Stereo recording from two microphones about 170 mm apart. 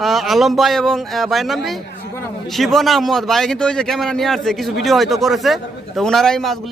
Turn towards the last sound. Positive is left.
turn(degrees=5)  # may be behind; listen again after turning